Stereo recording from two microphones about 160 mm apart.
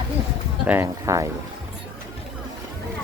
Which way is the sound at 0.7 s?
15° right (ahead or behind).